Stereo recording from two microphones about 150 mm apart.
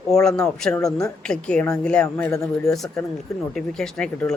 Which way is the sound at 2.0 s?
15° left (ahead or behind).